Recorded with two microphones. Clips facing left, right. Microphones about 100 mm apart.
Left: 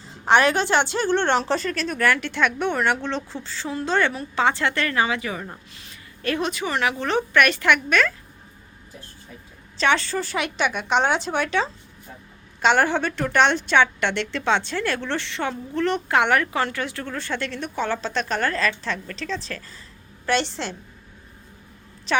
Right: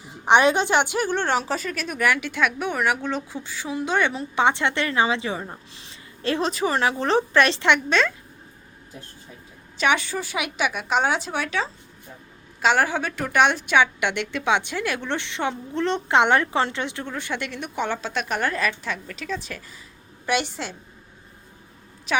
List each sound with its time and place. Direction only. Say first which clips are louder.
0.0 s a woman's voice: right 1 dB; 15° right (ahead or behind)
9.7 s a woman's voice: left 1 dB; 10° right (ahead or behind)
22.1 s a woman's voice: left 1 dB; 10° right (ahead or behind)